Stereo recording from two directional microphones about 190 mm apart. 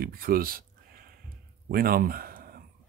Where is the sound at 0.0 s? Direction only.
50° right (ahead or behind).